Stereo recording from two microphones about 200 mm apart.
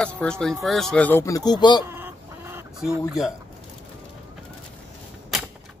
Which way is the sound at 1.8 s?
10° right (ahead or behind).